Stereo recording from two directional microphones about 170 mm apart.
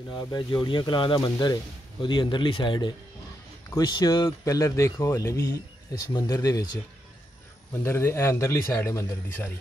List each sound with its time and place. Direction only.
0.1 s speech: 25° left (ahead or behind)
7.8 s a man's voice: 15° left (ahead or behind)